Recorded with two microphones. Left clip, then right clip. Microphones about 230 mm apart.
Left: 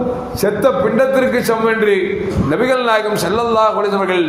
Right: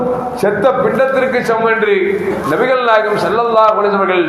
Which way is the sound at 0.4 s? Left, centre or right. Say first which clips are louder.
Right 1 dB; left.